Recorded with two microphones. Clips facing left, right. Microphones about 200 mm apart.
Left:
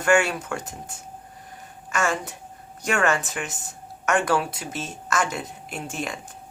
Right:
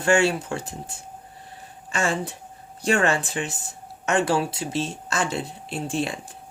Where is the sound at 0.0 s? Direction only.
30° right (ahead or behind).